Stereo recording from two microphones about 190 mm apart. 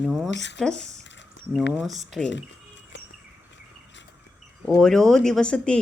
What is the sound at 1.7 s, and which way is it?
Speech, centre (ahead or behind).